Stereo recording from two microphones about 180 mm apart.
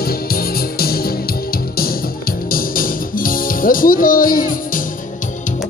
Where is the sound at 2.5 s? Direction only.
50° left (ahead or behind).